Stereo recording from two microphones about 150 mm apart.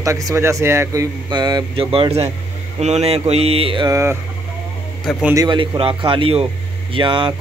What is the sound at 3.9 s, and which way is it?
Speech, 15° right (ahead or behind).